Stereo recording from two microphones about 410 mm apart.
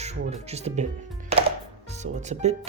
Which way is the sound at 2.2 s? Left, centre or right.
Centre.